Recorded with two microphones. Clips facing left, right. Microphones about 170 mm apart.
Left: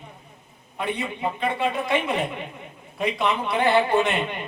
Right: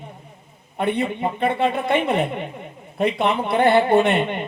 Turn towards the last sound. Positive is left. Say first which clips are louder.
# right 5 dB
turn(degrees=-60)  # may be behind; listen again after turning